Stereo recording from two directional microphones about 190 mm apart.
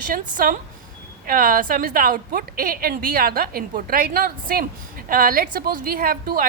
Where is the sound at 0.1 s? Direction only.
45° right (ahead or behind).